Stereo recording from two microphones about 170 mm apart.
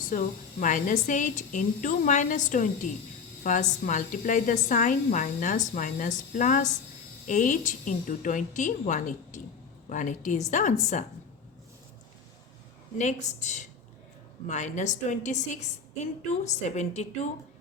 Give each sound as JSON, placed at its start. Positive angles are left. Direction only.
{"t": 0.1, "sound": "a woman's voice", "side_deg": 50}
{"t": 13.0, "sound": "a woman's voice", "side_deg": 45}